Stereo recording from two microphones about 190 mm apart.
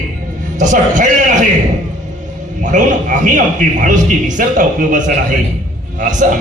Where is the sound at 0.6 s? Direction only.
40° right (ahead or behind).